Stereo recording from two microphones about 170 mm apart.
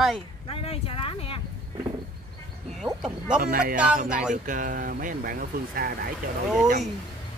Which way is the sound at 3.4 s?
60° right (ahead or behind).